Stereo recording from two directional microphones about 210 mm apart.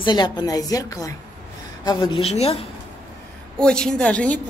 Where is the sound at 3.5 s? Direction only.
5° left (ahead or behind).